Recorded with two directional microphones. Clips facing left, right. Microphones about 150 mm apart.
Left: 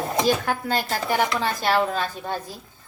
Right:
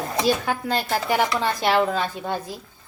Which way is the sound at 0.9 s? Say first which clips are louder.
Right 3 dB; 10° right (ahead or behind).